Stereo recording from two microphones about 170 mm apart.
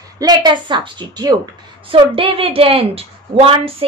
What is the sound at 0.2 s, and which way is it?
A woman's voice, 25° right (ahead or behind).